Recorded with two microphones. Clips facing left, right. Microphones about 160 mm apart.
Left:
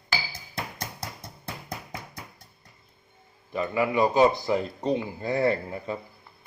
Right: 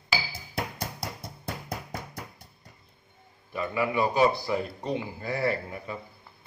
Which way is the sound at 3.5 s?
25° left (ahead or behind).